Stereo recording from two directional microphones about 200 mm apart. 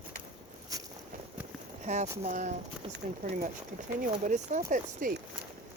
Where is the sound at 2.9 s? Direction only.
50° right (ahead or behind).